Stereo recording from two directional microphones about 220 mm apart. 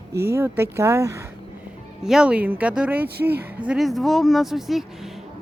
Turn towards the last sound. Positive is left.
turn(degrees=0)  # may be behind; listen again after turning